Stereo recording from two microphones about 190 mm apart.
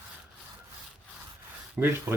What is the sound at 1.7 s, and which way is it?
Speech, 10° right (ahead or behind).